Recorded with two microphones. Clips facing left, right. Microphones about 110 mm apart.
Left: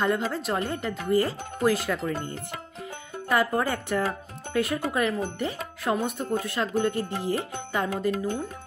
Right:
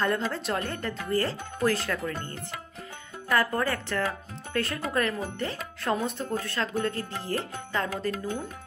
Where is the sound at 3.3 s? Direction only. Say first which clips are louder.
Left 2 dB; 15° left (ahead or behind).